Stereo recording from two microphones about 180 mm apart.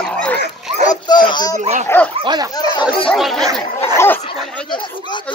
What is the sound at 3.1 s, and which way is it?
Speech, centre (ahead or behind).